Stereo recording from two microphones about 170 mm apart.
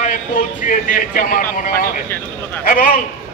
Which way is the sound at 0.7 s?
50° left (ahead or behind).